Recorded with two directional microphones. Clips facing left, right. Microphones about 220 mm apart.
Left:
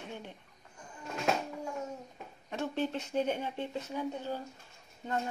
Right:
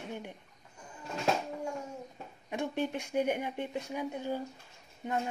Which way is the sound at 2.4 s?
15° right (ahead or behind).